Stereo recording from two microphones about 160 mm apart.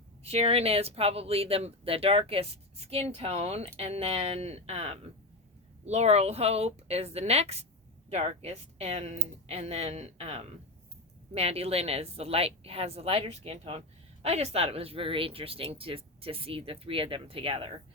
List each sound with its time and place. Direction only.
0.2 s a woman's voice: 40° right (ahead or behind)